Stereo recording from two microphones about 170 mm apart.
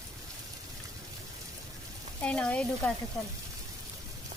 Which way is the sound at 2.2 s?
5° left (ahead or behind).